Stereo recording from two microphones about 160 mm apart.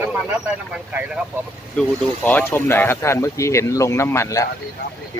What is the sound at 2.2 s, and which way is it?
Speech, 10° left (ahead or behind).